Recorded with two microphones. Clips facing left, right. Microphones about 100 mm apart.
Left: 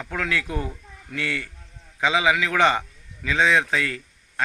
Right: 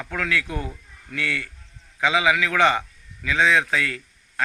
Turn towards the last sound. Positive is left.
turn(degrees=25)  # may be behind; listen again after turning